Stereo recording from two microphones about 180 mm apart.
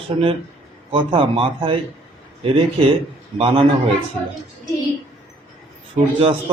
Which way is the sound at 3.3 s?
30° right (ahead or behind).